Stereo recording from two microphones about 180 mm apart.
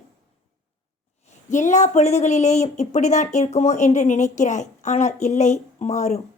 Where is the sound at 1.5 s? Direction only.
40° left (ahead or behind).